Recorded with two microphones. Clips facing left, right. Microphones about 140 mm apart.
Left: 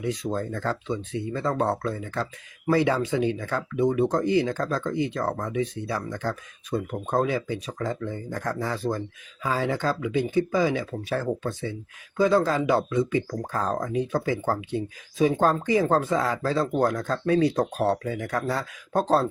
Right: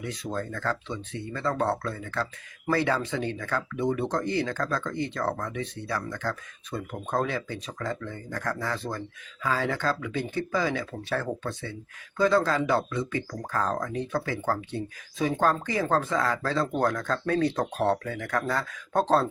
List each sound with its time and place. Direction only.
0.0 s speech: 20° left (ahead or behind)